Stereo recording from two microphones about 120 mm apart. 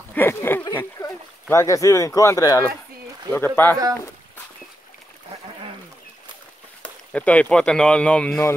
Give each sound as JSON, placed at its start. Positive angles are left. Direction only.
{"t": 0.1, "sound": "a sound", "side_deg": 20}
{"t": 3.3, "sound": "speech", "side_deg": 15}
{"t": 6.8, "sound": "speech", "side_deg": 10}